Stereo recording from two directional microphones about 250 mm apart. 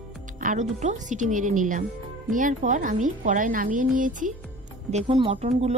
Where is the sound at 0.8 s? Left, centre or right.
Right.